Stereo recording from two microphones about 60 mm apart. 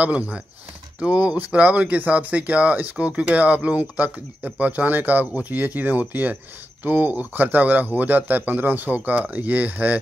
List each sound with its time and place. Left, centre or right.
0.0 s speech: centre